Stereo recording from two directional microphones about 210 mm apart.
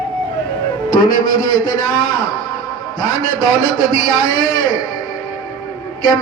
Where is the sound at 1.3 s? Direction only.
20° left (ahead or behind).